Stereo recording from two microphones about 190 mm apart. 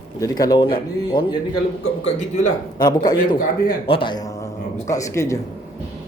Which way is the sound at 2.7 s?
20° left (ahead or behind).